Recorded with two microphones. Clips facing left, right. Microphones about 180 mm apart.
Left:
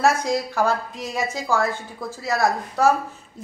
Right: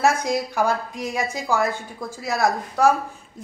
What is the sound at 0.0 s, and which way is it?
A woman's voice, 15° right (ahead or behind).